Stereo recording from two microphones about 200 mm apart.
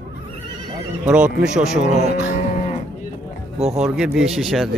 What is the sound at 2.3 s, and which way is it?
Livestock, 35° left (ahead or behind).